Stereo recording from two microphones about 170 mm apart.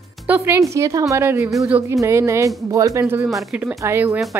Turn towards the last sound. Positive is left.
turn(degrees=-15)  # may be behind; listen again after turning